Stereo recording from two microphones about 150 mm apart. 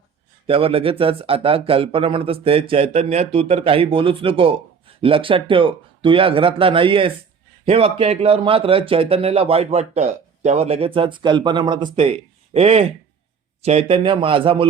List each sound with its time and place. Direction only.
0.4 s a man's voice: 40° right (ahead or behind)
12.5 s a man's voice: 45° right (ahead or behind)